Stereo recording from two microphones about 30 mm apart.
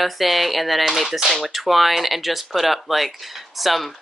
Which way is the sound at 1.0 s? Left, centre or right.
Centre.